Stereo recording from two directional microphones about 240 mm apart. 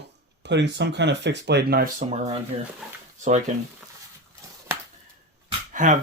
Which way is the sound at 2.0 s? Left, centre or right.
Right.